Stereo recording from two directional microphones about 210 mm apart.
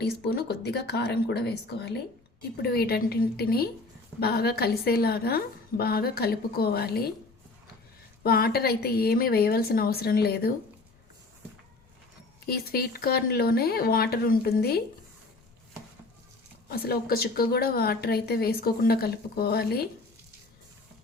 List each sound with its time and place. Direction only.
0.0 s a woman's voice: 50° left (ahead or behind)
8.2 s a woman's voice: 45° left (ahead or behind)
12.5 s a woman's voice: 45° left (ahead or behind)
16.6 s a woman's voice: 45° left (ahead or behind)